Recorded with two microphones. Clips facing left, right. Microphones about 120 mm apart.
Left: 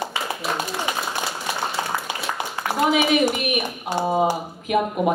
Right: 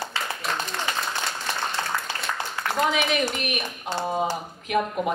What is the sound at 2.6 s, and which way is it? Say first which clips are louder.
A woman's voice: left 4 dB; 15° left (ahead or behind).